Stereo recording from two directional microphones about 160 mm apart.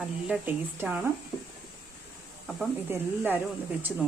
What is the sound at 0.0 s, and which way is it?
Speech, 10° right (ahead or behind).